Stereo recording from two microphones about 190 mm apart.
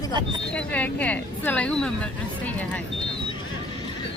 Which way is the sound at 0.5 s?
5° left (ahead or behind).